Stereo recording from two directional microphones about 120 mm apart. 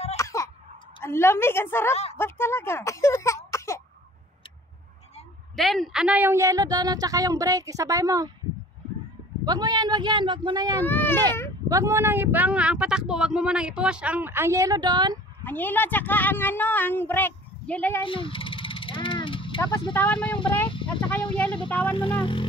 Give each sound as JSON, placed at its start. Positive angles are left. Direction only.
{"t": 0.2, "sound": "a sound", "side_deg": 25}
{"t": 1.0, "sound": "a woman's voice", "side_deg": 20}
{"t": 5.6, "sound": "a woman's voice", "side_deg": 0}
{"t": 6.0, "sound": "speech", "side_deg": -15}
{"t": 6.3, "sound": "speech", "side_deg": -25}
{"t": 9.4, "sound": "speech", "side_deg": -35}
{"t": 10.8, "sound": "a woman's voice", "side_deg": 15}
{"t": 11.7, "sound": "speech", "side_deg": -25}
{"t": 14.8, "sound": "speech", "side_deg": -35}
{"t": 15.4, "sound": "a woman's voice", "side_deg": 15}
{"t": 18.0, "sound": "vehicle", "side_deg": 45}
{"t": 19.9, "sound": "a woman's voice", "side_deg": 15}
{"t": 22.2, "sound": "music", "side_deg": 45}